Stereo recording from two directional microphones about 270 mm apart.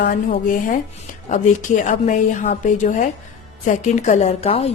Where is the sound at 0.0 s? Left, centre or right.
Left.